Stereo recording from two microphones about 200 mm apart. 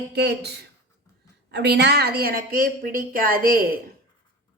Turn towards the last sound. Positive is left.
turn(degrees=-45)  # may be behind; listen again after turning